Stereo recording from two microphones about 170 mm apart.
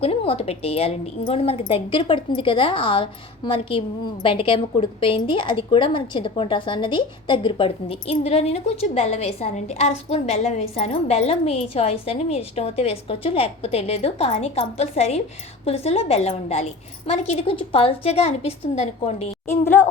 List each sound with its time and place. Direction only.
0.0 s a woman's voice: 35° left (ahead or behind)
19.5 s a woman's voice: 10° left (ahead or behind)